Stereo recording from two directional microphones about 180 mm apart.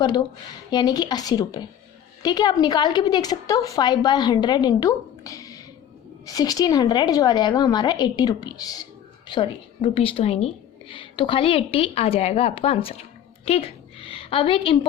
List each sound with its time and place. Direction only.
0.0 s a woman's voice: 25° left (ahead or behind)